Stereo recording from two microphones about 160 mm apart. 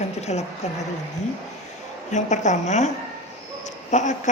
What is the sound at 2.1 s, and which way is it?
Speech, 50° left (ahead or behind).